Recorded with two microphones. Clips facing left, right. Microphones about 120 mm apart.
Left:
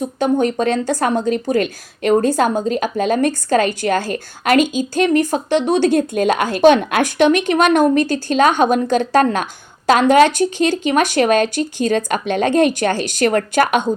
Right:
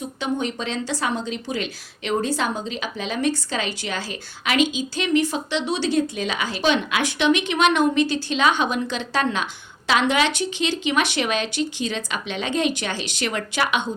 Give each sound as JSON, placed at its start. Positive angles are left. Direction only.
{"t": 0.0, "sound": "speech", "side_deg": 50}